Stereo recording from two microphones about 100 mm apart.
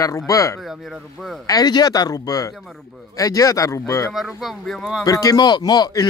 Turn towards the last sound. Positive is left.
turn(degrees=40)  # may be behind; listen again after turning